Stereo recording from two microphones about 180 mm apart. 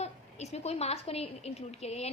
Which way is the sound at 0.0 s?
35° left (ahead or behind).